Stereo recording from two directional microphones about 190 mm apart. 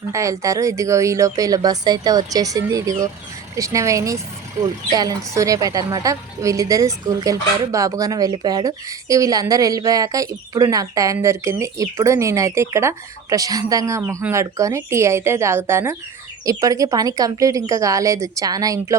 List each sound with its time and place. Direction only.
0.1 s speech: 15° right (ahead or behind)